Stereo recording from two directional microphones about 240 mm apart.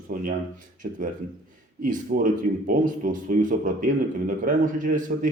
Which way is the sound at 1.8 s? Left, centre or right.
Right.